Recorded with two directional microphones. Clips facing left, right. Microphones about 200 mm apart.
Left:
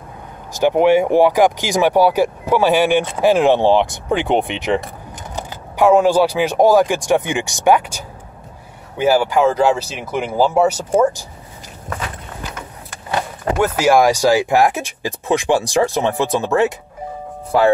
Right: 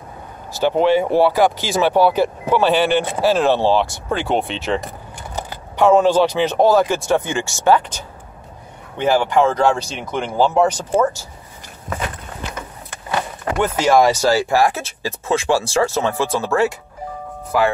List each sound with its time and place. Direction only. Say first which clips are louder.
0.6 s speech: left 3 dB; 15° left (ahead or behind)
13.6 s speech: left 1 dB; 10° left (ahead or behind)